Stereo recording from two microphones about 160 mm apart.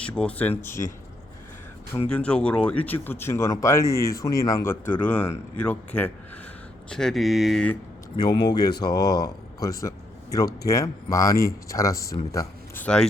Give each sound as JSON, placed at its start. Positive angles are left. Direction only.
{"t": 0.0, "sound": "speech", "side_deg": 10}
{"t": 2.0, "sound": "speech", "side_deg": 5}
{"t": 8.1, "sound": "speech", "side_deg": 25}
{"t": 12.8, "sound": "speech", "side_deg": 5}